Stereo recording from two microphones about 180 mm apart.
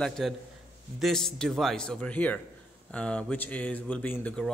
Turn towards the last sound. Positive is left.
turn(degrees=5)  # may be behind; listen again after turning